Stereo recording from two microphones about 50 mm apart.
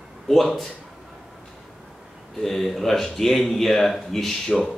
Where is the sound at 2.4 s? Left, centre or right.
Centre.